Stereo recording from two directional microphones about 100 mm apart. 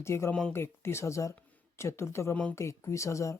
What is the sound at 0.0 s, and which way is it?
Speech, 25° left (ahead or behind).